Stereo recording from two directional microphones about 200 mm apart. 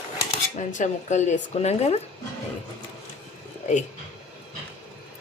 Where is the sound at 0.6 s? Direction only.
40° left (ahead or behind).